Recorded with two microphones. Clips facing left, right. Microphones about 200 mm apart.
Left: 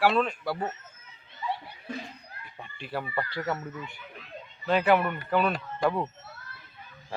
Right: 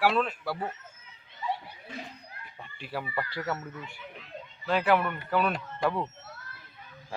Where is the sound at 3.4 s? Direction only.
10° left (ahead or behind).